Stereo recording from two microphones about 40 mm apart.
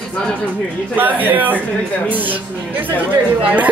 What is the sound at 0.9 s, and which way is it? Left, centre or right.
A man's voice, right.